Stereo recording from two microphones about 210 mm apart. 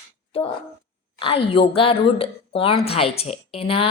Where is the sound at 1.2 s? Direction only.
25° left (ahead or behind).